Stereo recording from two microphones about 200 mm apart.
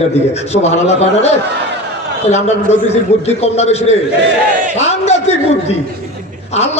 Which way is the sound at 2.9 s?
30° left (ahead or behind).